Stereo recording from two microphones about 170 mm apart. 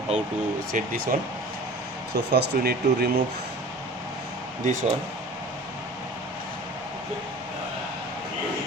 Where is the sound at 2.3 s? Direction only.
70° right (ahead or behind).